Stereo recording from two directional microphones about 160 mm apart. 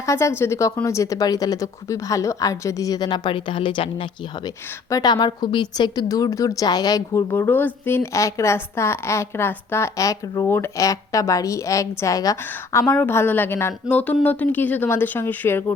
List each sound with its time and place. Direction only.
0.0 s a woman's voice: 15° left (ahead or behind)